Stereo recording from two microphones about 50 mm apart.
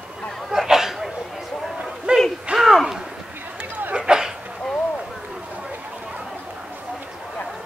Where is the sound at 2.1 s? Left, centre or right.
Centre.